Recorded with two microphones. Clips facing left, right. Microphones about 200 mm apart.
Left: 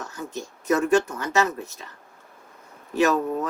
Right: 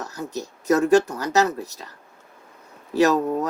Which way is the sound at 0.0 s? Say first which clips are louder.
Right 3 dB; 40° right (ahead or behind).